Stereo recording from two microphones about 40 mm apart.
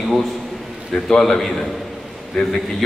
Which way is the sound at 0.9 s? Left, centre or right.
Centre.